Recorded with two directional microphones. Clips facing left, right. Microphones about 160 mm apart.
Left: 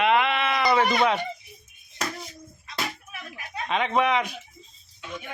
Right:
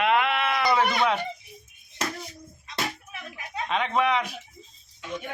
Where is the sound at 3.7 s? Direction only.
Centre (ahead or behind).